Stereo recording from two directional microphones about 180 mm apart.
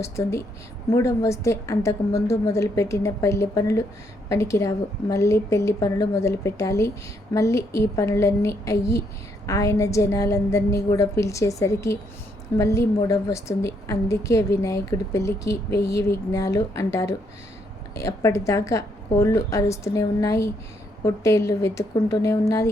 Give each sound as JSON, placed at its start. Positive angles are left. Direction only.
{"t": 0.0, "sound": "a woman's voice", "side_deg": 15}